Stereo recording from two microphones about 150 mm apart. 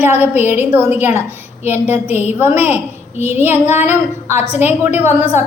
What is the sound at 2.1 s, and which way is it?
Speech, 45° left (ahead or behind).